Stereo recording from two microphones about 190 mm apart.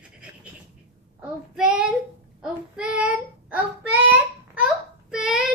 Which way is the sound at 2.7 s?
5° right (ahead or behind).